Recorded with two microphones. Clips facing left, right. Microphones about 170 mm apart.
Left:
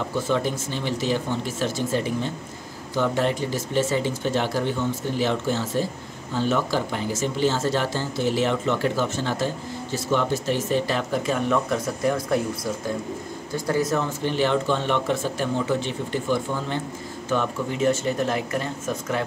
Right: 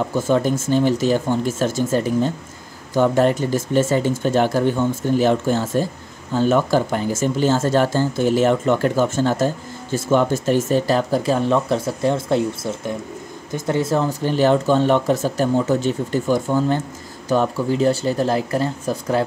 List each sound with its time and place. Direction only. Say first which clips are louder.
0.3 s speech: right 9 dB; 45° right (ahead or behind)